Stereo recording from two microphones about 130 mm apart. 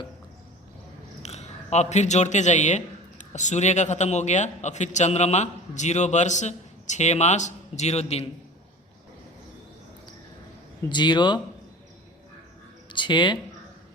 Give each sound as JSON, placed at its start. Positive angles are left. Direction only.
{"t": 1.2, "sound": "a man's voice", "side_deg": 55}
{"t": 10.8, "sound": "a man's voice", "side_deg": 35}
{"t": 12.9, "sound": "a man's voice", "side_deg": 35}